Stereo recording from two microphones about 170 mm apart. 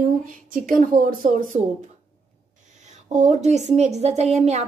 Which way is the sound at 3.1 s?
45° right (ahead or behind).